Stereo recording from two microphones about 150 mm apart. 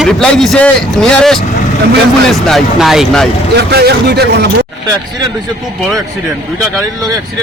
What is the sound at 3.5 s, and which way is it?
Speech, 90° right.